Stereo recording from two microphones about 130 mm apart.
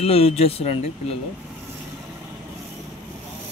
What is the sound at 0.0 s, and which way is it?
Speech, 50° left (ahead or behind).